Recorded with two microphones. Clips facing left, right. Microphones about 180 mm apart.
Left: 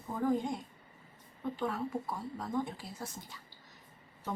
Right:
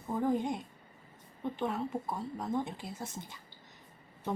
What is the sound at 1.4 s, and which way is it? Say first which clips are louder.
Speech: right 1 dB; 20° right (ahead or behind).